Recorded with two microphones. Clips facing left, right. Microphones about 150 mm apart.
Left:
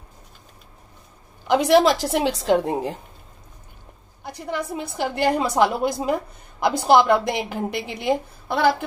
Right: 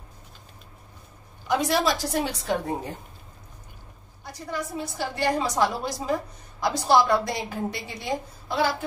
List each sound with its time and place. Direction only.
1.5 s a woman's voice: 85° left
4.7 s a woman's voice: 65° left (ahead or behind)